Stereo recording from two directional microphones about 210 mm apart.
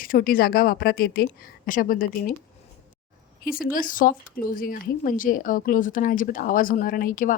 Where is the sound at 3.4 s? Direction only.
40° left (ahead or behind).